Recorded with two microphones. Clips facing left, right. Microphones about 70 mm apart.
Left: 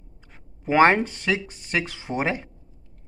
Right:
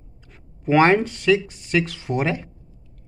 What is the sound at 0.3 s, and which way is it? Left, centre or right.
Speech, left.